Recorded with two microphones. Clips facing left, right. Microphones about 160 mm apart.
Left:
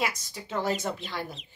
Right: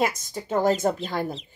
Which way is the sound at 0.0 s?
45° right (ahead or behind).